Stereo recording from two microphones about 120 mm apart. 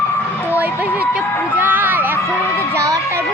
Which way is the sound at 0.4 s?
15° right (ahead or behind).